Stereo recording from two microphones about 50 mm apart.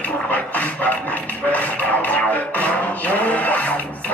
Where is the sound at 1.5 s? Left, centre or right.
Left.